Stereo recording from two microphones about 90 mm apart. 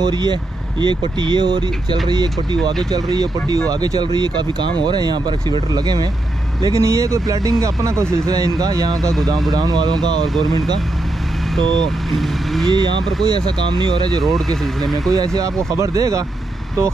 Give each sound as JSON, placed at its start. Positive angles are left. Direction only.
{"t": 0.0, "sound": "speech", "side_deg": -55}
{"t": 6.8, "sound": "speech", "side_deg": -35}
{"t": 10.2, "sound": "speech", "side_deg": 0}
{"t": 12.1, "sound": "speech", "side_deg": 0}
{"t": 12.6, "sound": "speech", "side_deg": -55}
{"t": 14.2, "sound": "speech", "side_deg": 0}
{"t": 15.3, "sound": "speech", "side_deg": -35}